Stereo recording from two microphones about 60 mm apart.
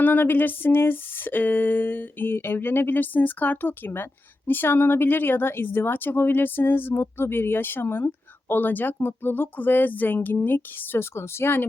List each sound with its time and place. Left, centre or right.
0.0 s speech: left
11.1 s speech: left